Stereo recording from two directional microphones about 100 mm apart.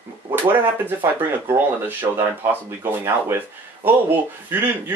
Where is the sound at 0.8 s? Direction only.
20° right (ahead or behind).